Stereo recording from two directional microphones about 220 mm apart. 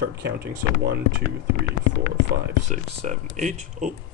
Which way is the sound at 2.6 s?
35° right (ahead or behind).